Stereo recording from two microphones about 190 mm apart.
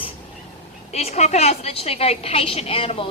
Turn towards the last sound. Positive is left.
turn(degrees=30)  # may be behind; listen again after turning